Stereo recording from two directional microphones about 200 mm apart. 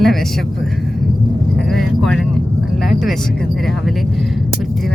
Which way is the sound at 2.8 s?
Centre (ahead or behind).